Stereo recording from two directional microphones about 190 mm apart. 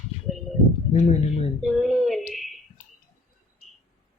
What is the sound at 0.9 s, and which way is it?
Speech, 35° left (ahead or behind).